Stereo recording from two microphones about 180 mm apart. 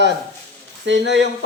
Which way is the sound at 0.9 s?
85° right.